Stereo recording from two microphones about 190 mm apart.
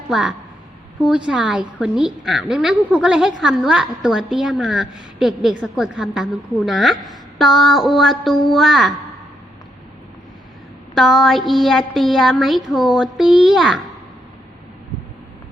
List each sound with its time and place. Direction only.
0.1 s a woman's voice: centre (ahead or behind)
10.9 s a woman's voice: centre (ahead or behind)